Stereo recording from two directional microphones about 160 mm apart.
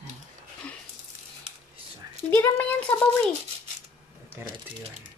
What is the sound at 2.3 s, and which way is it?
A child's voice, 10° left (ahead or behind).